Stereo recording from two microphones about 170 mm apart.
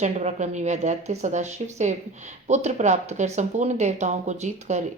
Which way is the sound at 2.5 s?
45° right (ahead or behind).